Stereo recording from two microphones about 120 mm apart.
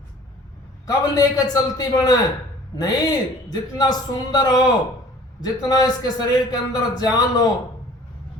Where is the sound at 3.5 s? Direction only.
35° left (ahead or behind).